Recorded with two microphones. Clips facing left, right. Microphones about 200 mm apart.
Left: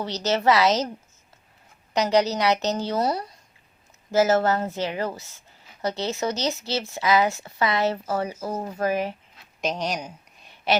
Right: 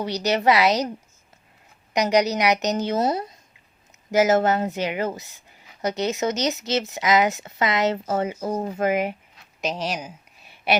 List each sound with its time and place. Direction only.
0.0 s a woman's voice: 15° right (ahead or behind)
1.9 s a woman's voice: 15° right (ahead or behind)
9.6 s a sound: centre (ahead or behind)